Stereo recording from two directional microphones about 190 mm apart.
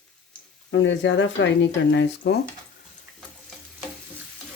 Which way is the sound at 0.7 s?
70° left (ahead or behind).